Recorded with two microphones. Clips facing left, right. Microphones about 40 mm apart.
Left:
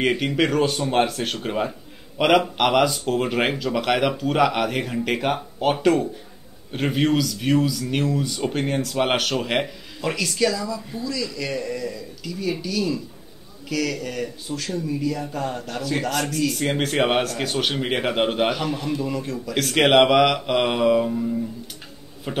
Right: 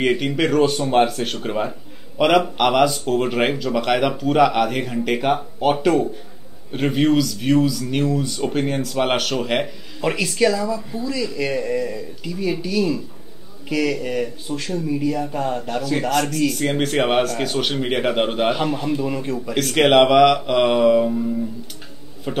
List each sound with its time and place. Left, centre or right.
0.0 s a man's voice: centre
10.0 s a man's voice: centre
15.8 s speech: centre
18.5 s a man's voice: centre
19.5 s speech: centre